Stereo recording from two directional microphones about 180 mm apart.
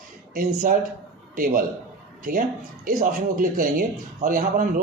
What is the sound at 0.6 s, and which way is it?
A man's voice, 50° right (ahead or behind).